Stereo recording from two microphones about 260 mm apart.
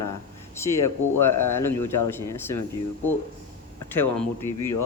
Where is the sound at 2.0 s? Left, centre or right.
Centre.